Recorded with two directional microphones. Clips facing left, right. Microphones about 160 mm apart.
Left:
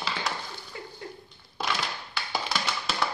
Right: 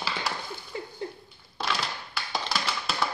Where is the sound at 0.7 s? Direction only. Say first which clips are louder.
Right 5 dB; 25° right (ahead or behind).